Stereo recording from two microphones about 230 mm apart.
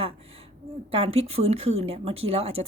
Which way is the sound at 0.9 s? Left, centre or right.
Right.